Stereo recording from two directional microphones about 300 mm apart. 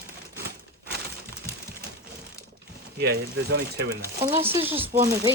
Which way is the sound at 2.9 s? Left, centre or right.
Right.